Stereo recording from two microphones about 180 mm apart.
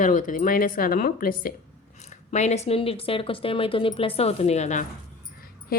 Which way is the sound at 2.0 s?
40° left (ahead or behind).